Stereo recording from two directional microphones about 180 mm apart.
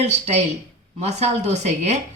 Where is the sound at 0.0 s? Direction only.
35° right (ahead or behind).